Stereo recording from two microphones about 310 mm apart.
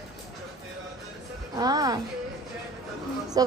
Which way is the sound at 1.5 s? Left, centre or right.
Centre.